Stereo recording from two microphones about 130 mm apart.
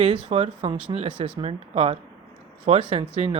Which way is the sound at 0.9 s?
35° right (ahead or behind).